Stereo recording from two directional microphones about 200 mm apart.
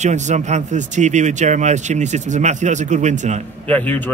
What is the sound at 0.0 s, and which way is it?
Speech, 35° right (ahead or behind).